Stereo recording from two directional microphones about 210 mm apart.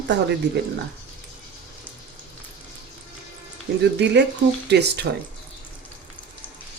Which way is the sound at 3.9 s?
55° right (ahead or behind).